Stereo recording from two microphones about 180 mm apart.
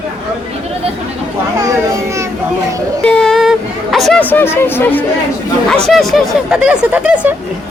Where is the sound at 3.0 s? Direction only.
5° left (ahead or behind).